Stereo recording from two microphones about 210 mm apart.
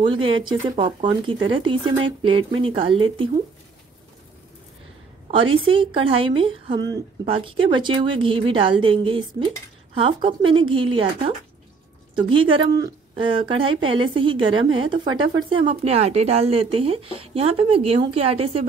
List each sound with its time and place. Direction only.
0.0 s speech: 25° right (ahead or behind)
5.3 s speech: 25° right (ahead or behind)